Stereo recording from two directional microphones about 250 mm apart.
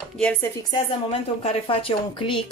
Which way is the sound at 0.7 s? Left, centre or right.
Left.